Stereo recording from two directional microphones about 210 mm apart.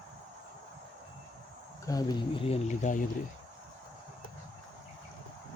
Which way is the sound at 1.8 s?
15° left (ahead or behind).